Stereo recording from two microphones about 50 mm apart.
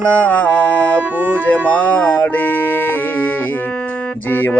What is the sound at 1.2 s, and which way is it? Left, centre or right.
Music, right.